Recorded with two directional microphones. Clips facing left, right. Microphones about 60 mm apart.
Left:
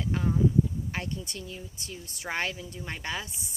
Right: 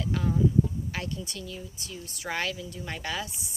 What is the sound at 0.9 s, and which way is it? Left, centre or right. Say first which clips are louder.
Speech: even; left.